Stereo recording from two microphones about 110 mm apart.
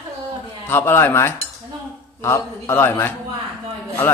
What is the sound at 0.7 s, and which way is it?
A man's voice, 20° left (ahead or behind).